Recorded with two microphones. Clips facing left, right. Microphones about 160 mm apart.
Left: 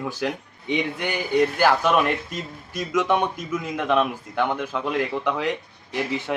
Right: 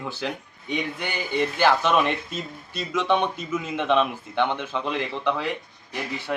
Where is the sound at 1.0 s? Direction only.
10° left (ahead or behind).